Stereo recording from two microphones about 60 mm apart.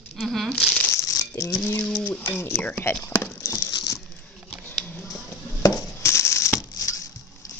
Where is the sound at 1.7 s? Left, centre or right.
Left.